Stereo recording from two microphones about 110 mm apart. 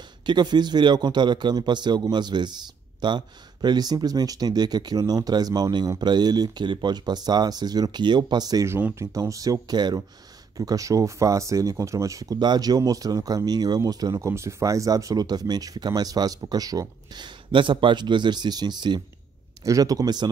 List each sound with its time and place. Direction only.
0.3 s a man's voice: 40° right (ahead or behind)
8.6 s a man's voice: 20° right (ahead or behind)